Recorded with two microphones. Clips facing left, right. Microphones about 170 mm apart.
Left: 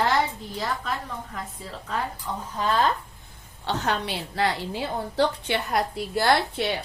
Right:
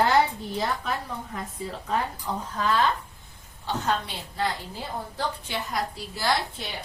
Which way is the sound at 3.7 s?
75° left (ahead or behind).